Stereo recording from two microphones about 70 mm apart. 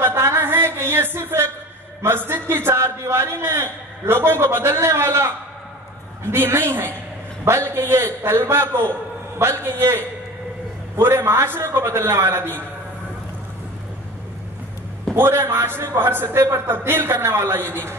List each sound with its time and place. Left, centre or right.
0.0 s a sound: right
2.0 s a man's voice: right
6.3 s a man's voice: right
15.1 s a man's voice: right